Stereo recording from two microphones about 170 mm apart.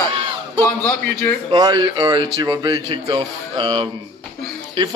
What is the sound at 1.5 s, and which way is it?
A man's voice, 25° right (ahead or behind).